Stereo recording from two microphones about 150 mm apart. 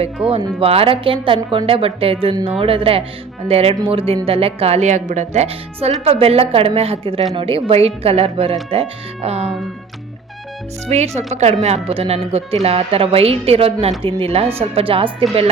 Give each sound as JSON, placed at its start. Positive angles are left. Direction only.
{"t": 0.2, "sound": "a woman's voice", "side_deg": -40}
{"t": 10.8, "sound": "a woman's voice", "side_deg": -45}